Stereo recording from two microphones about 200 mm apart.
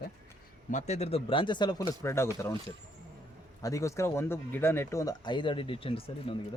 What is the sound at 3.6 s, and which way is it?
Speech, 15° left (ahead or behind).